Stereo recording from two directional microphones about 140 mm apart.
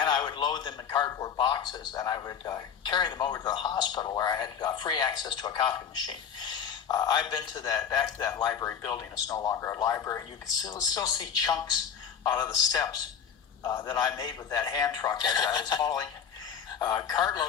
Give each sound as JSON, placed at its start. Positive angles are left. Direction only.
{"t": 0.0, "sound": "a man's voice", "side_deg": 30}